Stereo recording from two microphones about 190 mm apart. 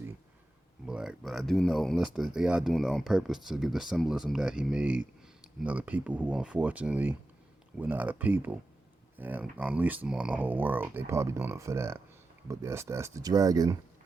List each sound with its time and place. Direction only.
0.9 s speech: 5° right (ahead or behind)